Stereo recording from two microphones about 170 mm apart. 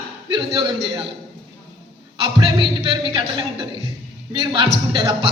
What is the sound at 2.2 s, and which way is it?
A man's voice, 25° right (ahead or behind).